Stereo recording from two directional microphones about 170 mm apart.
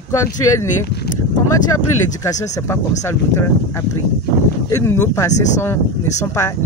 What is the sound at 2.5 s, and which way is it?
Speech, 15° left (ahead or behind).